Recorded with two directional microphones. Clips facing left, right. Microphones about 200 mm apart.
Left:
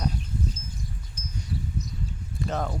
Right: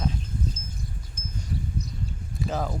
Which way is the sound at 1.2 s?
50° right (ahead or behind).